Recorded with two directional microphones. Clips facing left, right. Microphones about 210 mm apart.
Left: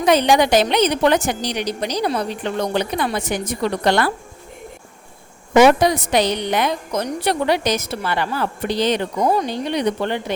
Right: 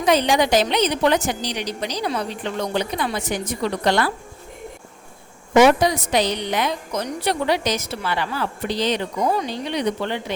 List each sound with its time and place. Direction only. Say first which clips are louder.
0.0 s a woman's voice: left 3 dB; 60° left (ahead or behind); by 2.6 s 45° left (ahead or behind)
2.7 s a woman's voice: left 3 dB; 60° left (ahead or behind)
5.6 s a woman's voice: left 2 dB; 60° left (ahead or behind)